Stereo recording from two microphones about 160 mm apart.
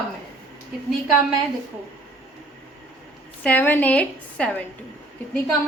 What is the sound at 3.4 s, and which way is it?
A woman's voice, 10° left (ahead or behind).